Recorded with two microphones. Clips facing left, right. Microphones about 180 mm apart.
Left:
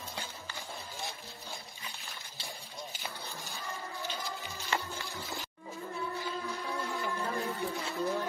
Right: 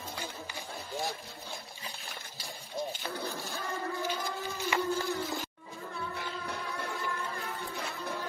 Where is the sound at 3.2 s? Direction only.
60° right (ahead or behind).